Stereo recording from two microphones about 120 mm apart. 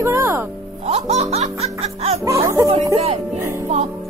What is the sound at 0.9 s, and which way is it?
Music, 60° right (ahead or behind).